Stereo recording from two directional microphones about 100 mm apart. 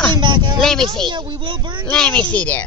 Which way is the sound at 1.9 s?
10° left (ahead or behind).